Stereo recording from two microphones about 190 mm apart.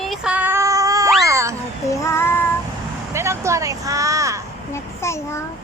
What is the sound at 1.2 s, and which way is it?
Music, 15° right (ahead or behind).